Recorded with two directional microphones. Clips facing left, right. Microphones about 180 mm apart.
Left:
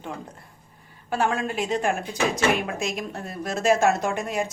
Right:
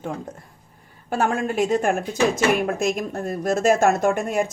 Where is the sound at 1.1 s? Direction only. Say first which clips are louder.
Right 3 dB; 45° right (ahead or behind).